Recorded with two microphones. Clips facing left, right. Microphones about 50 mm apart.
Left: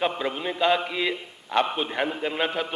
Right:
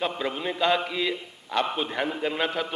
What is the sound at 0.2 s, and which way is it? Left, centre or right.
A man's voice, centre.